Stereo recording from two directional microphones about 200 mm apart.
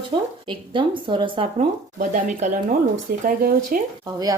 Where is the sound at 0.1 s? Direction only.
30° right (ahead or behind); by 3.8 s 45° right (ahead or behind).